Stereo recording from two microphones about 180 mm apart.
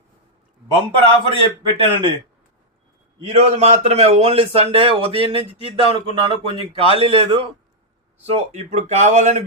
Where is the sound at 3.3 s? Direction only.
35° right (ahead or behind).